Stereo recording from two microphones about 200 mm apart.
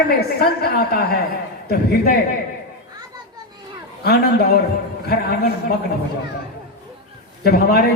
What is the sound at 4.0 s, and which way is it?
A woman's voice, 50° left (ahead or behind).